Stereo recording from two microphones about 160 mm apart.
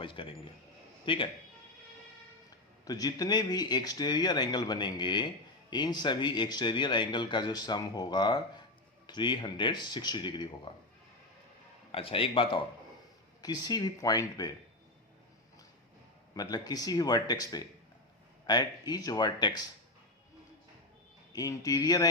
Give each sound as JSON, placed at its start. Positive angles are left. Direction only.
{"t": 0.0, "sound": "a man's voice", "side_deg": 30}
{"t": 2.8, "sound": "speech", "side_deg": 25}
{"t": 11.9, "sound": "a man's voice", "side_deg": 35}
{"t": 16.3, "sound": "speech", "side_deg": 25}
{"t": 21.3, "sound": "speech", "side_deg": 20}